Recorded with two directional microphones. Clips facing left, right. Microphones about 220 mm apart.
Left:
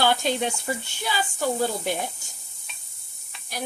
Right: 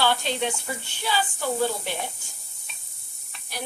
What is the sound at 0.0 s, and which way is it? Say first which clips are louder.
Speech: left 2 dB; 45° left (ahead or behind).